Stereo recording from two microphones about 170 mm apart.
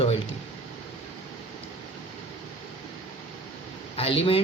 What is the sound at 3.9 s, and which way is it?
Speech, 35° left (ahead or behind).